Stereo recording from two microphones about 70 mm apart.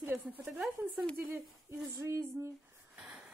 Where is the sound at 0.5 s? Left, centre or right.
Centre.